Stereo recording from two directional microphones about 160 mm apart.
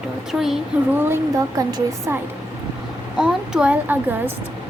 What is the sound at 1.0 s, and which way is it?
A woman's voice, 15° right (ahead or behind).